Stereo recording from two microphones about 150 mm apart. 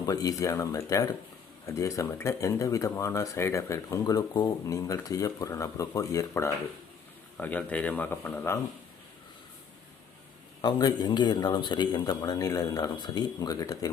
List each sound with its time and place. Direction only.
0.0 s a man's voice: 25° left (ahead or behind)
10.6 s speech: 25° left (ahead or behind)